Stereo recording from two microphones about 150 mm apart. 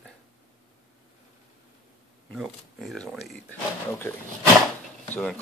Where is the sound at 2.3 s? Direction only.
Centre (ahead or behind).